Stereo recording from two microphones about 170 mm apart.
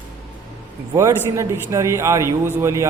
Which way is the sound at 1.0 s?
15° right (ahead or behind).